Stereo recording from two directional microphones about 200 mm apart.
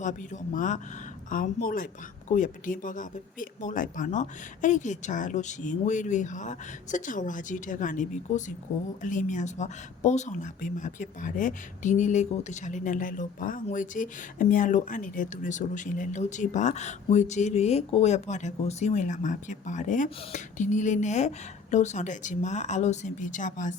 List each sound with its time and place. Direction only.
0.0 s a woman's voice: 40° left (ahead or behind)